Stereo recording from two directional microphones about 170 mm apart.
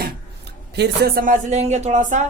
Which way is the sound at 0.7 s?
75° right (ahead or behind).